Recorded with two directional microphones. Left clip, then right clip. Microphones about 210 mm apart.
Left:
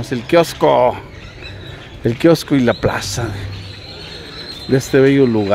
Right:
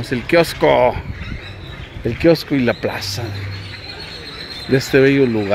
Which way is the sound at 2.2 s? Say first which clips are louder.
Left 1 dB; 20° left (ahead or behind).